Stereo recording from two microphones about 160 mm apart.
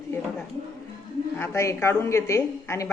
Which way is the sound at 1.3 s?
15° left (ahead or behind).